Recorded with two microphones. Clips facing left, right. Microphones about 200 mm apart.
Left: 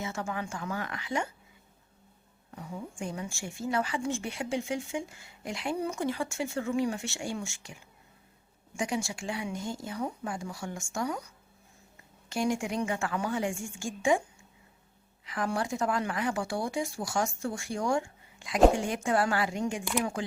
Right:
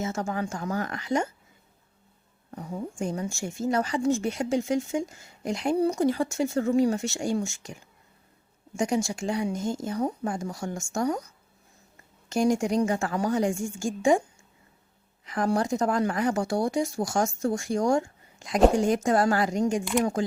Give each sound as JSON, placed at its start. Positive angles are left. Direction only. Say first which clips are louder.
{"t": 0.0, "sound": "speech", "louder": "right 5 dB", "side_deg": -40}
{"t": 2.6, "sound": "speech", "louder": "right 6 dB", "side_deg": -40}
{"t": 12.3, "sound": "speech", "louder": "right 6 dB", "side_deg": -40}
{"t": 15.3, "sound": "speech", "louder": "right 6 dB", "side_deg": -40}